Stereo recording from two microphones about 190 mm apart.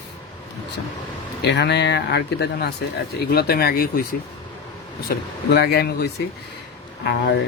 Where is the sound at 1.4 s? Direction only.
65° left (ahead or behind).